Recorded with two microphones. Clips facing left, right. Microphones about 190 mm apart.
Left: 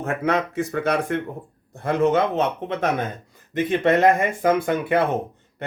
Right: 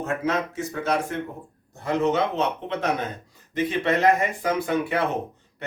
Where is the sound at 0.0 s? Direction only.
60° left (ahead or behind).